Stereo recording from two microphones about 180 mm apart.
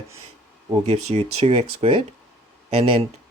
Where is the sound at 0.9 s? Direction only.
35° right (ahead or behind).